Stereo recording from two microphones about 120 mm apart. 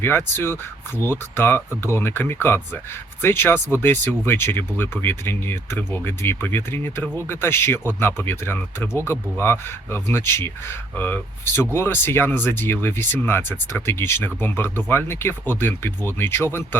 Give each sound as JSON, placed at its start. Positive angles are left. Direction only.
{"t": 0.0, "sound": "speech", "side_deg": 20}